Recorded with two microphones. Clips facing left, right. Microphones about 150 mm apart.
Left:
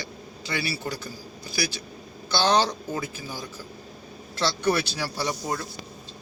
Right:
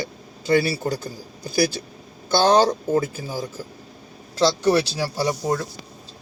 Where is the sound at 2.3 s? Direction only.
50° right (ahead or behind).